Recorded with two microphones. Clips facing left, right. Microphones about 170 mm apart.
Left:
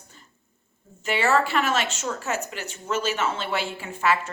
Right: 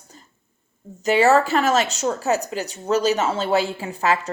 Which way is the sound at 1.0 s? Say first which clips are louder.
Right 6 dB; 40° right (ahead or behind).